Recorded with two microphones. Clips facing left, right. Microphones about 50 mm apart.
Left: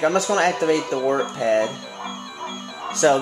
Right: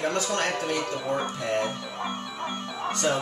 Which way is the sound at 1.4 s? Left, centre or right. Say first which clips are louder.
Left 8 dB; left.